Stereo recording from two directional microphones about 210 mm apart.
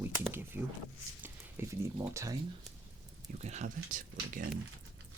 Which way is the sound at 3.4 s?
30° right (ahead or behind).